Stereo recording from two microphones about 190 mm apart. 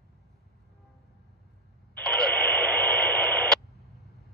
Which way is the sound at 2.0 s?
5° left (ahead or behind).